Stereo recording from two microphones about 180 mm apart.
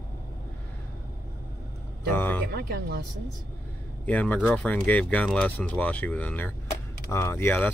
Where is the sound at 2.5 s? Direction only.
60° right (ahead or behind).